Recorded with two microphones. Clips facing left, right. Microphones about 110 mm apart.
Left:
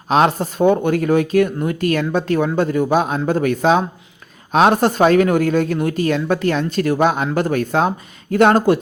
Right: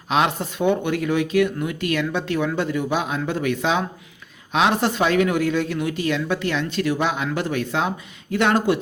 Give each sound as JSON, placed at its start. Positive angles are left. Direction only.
{"t": 0.1, "sound": "speech", "side_deg": 40}